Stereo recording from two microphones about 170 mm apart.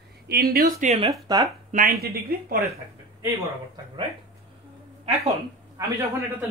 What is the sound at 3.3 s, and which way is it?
Speech, 25° right (ahead or behind).